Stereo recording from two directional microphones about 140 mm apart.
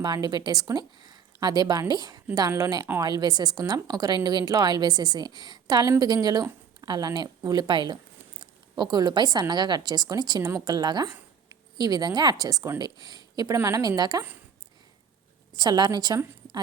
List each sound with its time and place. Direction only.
0.0 s a woman's voice: 30° right (ahead or behind)
15.5 s a woman's voice: 30° right (ahead or behind)